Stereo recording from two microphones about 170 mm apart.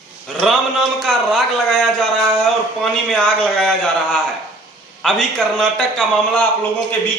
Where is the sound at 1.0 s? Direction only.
Centre (ahead or behind).